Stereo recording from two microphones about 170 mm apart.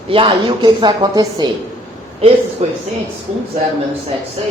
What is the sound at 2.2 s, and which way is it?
Speech, 35° right (ahead or behind).